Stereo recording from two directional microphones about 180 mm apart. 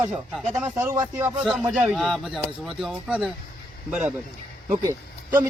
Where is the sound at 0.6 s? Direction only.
15° right (ahead or behind).